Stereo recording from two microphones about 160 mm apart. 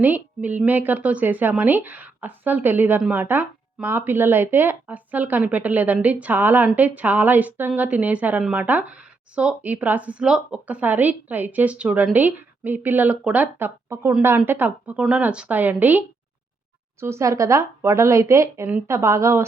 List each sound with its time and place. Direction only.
0.0 s a woman's voice: 10° right (ahead or behind)